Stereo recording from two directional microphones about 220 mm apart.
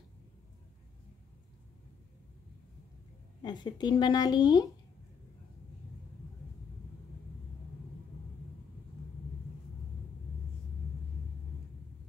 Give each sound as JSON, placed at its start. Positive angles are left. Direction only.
{"t": 3.4, "sound": "speech", "side_deg": 20}